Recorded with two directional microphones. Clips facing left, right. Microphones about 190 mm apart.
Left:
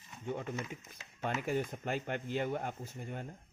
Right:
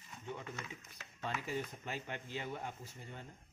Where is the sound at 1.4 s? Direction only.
55° left (ahead or behind).